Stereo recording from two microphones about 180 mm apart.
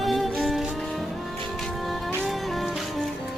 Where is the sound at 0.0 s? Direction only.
Centre (ahead or behind).